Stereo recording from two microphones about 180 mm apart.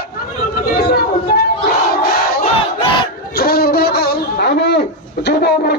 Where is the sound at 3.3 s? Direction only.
60° left (ahead or behind).